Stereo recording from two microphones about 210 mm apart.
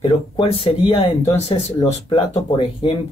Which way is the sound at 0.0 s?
25° left (ahead or behind).